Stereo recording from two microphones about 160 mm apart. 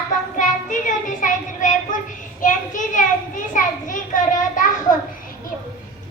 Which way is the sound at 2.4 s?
55° left (ahead or behind).